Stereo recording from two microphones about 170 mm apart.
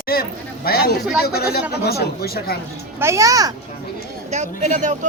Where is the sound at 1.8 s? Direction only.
65° left (ahead or behind).